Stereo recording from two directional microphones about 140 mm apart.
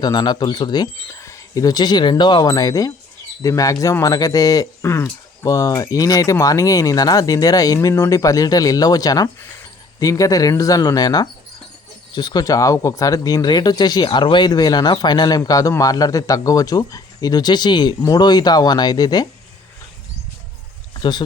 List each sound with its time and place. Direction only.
0.0 s speech: 30° left (ahead or behind)
20.9 s speech: 30° left (ahead or behind)